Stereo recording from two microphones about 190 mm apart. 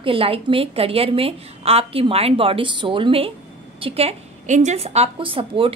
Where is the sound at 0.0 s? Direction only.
30° right (ahead or behind).